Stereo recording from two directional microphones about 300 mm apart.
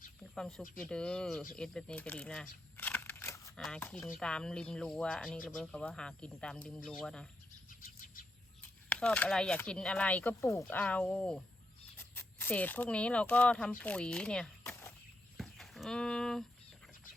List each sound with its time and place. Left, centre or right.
0.3 s speech: centre
7.8 s bird: left
8.9 s speech: centre
15.4 s dog: centre